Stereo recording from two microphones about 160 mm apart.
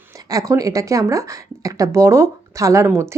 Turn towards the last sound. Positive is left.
turn(degrees=-15)  # may be behind; listen again after turning